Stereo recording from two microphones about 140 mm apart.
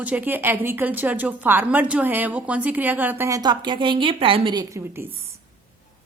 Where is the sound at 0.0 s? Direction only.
10° right (ahead or behind); by 4.6 s 40° right (ahead or behind).